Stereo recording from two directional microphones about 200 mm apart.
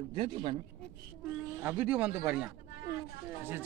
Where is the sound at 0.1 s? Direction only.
25° right (ahead or behind).